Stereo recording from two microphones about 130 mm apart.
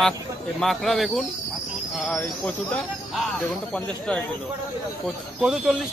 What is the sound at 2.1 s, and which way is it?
Speech, 10° left (ahead or behind).